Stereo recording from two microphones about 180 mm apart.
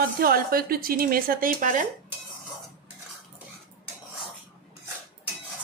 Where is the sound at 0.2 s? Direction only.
55° right (ahead or behind).